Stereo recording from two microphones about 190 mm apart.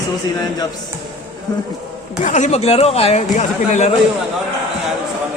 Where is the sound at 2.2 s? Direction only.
40° left (ahead or behind).